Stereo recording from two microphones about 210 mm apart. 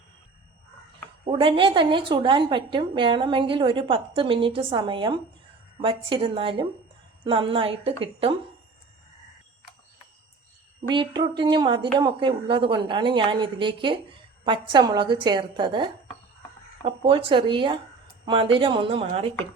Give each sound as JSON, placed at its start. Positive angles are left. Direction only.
{"t": 1.2, "sound": "a woman's voice", "side_deg": -25}
{"t": 10.8, "sound": "a woman's voice", "side_deg": -20}